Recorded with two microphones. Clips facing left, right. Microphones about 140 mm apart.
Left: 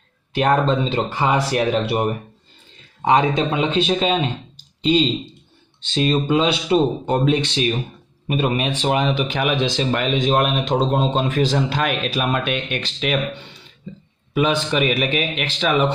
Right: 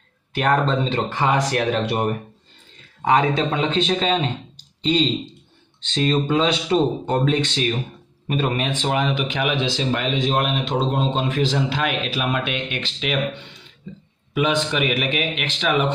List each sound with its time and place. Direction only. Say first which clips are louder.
0.3 s speech: left 2 dB; 20° left (ahead or behind); by 2.1 s 5° left (ahead or behind)
3.0 s speech: left 1 dB; 20° left (ahead or behind)
5.9 s speech: left 1 dB; 15° left (ahead or behind)
9.3 s a man's voice: left 2 dB; 45° left (ahead or behind)